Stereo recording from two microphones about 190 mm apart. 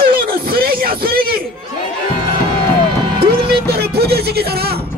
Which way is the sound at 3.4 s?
55° right (ahead or behind).